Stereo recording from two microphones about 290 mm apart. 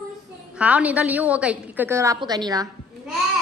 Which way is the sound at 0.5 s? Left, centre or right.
Centre.